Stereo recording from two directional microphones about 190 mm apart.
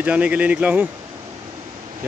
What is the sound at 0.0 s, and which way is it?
Speech, 5° right (ahead or behind).